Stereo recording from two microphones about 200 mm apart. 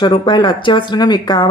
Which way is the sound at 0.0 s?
25° left (ahead or behind).